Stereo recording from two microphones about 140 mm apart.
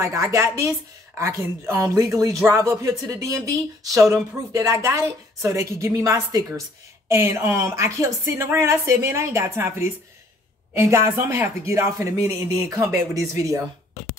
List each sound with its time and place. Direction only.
0.0 s speech: 25° right (ahead or behind)